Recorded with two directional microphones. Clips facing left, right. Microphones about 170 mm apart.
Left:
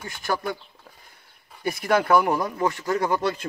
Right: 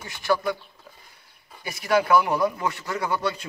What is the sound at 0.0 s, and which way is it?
Speech, 50° left (ahead or behind).